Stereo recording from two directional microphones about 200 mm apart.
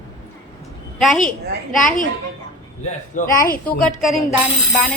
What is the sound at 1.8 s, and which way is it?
Speech, 40° left (ahead or behind).